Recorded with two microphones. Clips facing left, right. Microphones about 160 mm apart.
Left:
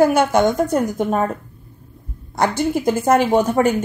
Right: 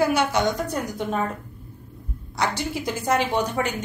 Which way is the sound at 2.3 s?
50° left (ahead or behind).